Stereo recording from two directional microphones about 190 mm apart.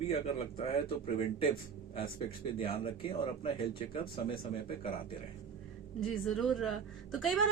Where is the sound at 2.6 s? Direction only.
25° left (ahead or behind).